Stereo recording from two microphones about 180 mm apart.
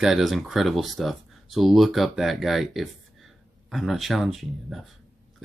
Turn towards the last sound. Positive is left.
turn(degrees=0)  # may be behind; listen again after turning